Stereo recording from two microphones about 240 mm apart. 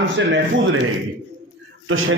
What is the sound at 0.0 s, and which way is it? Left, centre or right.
Speech, right.